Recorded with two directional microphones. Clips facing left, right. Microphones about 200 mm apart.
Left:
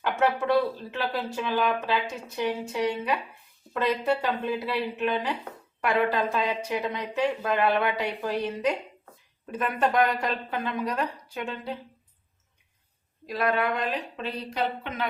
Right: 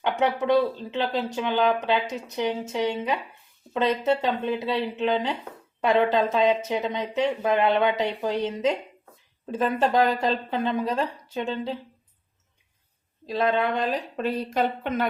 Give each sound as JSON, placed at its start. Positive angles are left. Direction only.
{"t": 0.2, "sound": "speech", "side_deg": -20}
{"t": 13.2, "sound": "speech", "side_deg": -25}
{"t": 14.2, "sound": "speech", "side_deg": -50}